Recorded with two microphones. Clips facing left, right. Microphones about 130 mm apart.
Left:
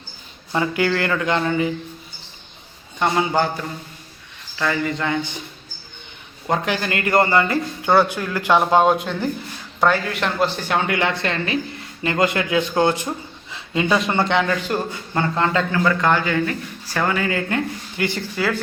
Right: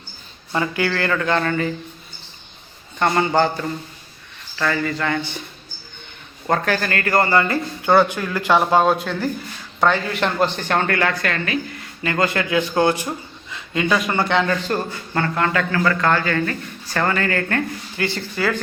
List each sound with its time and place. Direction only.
0.5 s a man's voice: 20° left (ahead or behind)
3.0 s a man's voice: 5° left (ahead or behind)
4.5 s a man's voice: 15° left (ahead or behind)
6.5 s a man's voice: 15° left (ahead or behind)
9.8 s speech: centre (ahead or behind); by 13.1 s 20° left (ahead or behind)
14.4 s a man's voice: 10° left (ahead or behind)